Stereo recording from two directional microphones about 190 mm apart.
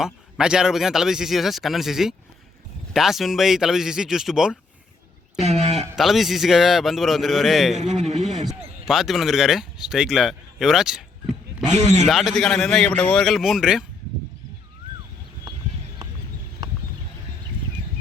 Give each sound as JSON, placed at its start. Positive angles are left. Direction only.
{"t": 0.0, "sound": "speech", "side_deg": -5}
{"t": 5.4, "sound": "speech", "side_deg": -35}
{"t": 6.0, "sound": "speech", "side_deg": 0}
{"t": 7.8, "sound": "speech", "side_deg": -35}
{"t": 8.1, "sound": "a sound", "side_deg": -40}
{"t": 8.9, "sound": "speech", "side_deg": 0}
{"t": 11.7, "sound": "speech", "side_deg": -35}
{"t": 12.0, "sound": "speech", "side_deg": 0}